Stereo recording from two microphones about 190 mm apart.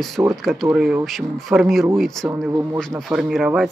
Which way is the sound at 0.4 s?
Centre (ahead or behind).